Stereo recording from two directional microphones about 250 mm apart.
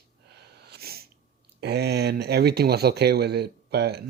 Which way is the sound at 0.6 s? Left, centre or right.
Right.